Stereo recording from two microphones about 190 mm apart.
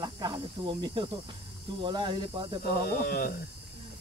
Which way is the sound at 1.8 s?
25° right (ahead or behind).